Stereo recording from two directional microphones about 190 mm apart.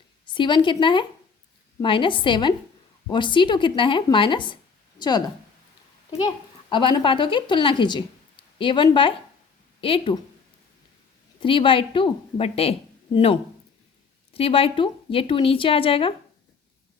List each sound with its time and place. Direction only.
0.3 s a woman's voice: 25° left (ahead or behind)
11.3 s a woman's voice: 25° left (ahead or behind)